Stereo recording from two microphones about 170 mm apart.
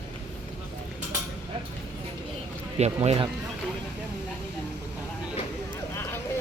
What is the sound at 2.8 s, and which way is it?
Speech, 40° right (ahead or behind).